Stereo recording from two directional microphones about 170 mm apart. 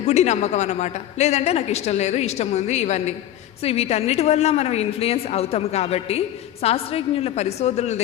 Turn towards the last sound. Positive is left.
turn(degrees=40)  # may be behind; listen again after turning